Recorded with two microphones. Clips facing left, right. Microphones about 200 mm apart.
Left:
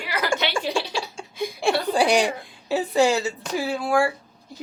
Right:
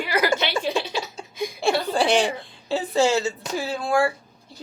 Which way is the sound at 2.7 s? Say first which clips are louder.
Left 1 dB; 15° left (ahead or behind).